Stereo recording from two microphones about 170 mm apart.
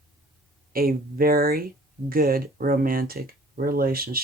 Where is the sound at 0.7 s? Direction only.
60° right (ahead or behind).